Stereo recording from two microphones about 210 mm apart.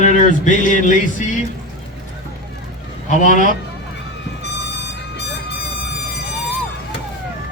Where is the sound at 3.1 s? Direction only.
40° left (ahead or behind).